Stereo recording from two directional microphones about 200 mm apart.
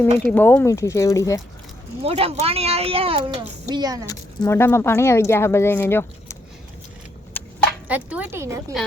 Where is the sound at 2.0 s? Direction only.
30° right (ahead or behind).